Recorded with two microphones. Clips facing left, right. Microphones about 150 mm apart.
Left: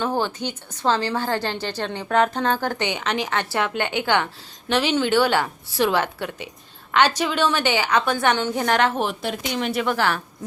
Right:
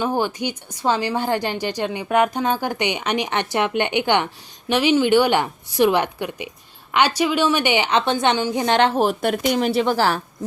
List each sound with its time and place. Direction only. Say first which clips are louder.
0.0 s a woman's voice: right 2 dB; 15° right (ahead or behind); by 9.1 s 35° right (ahead or behind)
9.2 s speech: right 7 dB; 55° right (ahead or behind)
9.6 s a woman's voice: right 4 dB; 35° right (ahead or behind)